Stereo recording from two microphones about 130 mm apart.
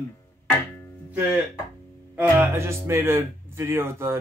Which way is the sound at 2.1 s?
15° right (ahead or behind).